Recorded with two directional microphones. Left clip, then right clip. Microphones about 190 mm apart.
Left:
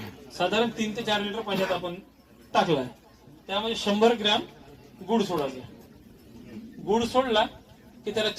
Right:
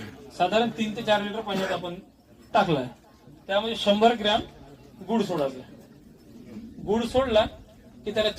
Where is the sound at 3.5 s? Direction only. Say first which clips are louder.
Right 4 dB; 30° right (ahead or behind).